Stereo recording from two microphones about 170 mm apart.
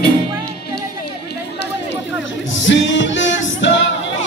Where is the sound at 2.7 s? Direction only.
90° left.